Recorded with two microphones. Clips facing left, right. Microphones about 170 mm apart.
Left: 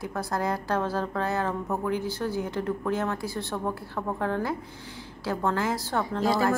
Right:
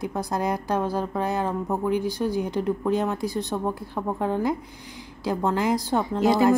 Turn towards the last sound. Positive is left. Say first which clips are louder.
# right 5 dB
turn(degrees=-20)  # may be behind; listen again after turning